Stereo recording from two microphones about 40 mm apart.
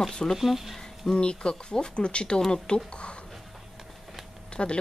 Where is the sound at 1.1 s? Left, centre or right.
Left.